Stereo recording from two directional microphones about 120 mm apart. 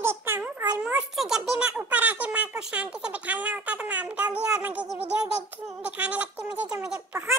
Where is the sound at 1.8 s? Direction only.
10° right (ahead or behind).